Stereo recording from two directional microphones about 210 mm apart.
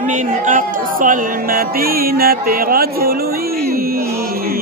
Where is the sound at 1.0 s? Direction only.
40° right (ahead or behind).